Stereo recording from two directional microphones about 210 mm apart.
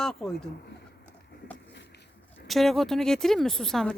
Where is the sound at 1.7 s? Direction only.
55° left (ahead or behind).